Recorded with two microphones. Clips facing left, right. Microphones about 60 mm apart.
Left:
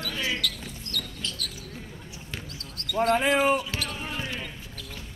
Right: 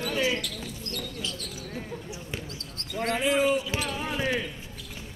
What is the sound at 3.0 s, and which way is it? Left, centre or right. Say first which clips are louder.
Speech: left 2 dB; left.